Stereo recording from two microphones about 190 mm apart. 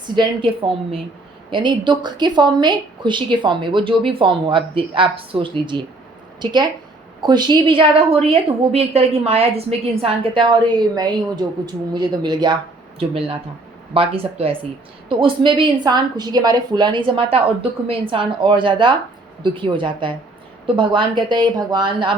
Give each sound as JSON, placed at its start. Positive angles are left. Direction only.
{"t": 0.2, "sound": "a woman's voice", "side_deg": -30}